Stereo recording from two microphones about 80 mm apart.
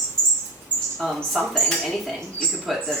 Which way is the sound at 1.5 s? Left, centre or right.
Centre.